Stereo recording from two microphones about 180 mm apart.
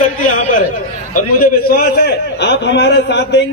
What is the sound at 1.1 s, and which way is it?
A man's voice, 55° left (ahead or behind).